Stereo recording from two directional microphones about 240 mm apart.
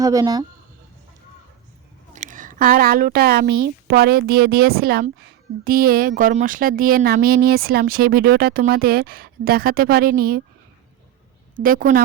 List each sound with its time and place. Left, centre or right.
0.0 s speech: centre
2.1 s speech: right
11.5 s speech: right